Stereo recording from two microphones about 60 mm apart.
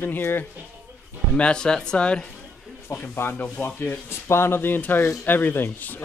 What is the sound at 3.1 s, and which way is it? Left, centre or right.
Speech, left.